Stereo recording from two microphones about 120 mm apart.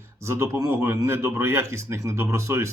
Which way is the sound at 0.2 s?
25° right (ahead or behind).